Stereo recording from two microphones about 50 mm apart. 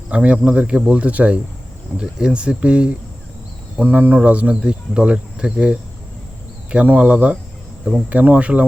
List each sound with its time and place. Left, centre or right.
0.1 s speech: right